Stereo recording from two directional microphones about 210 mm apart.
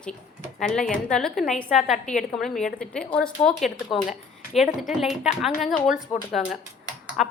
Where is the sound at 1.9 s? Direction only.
35° left (ahead or behind).